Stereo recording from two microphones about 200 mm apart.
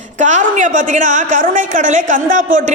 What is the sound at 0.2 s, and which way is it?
A woman's voice, 35° right (ahead or behind).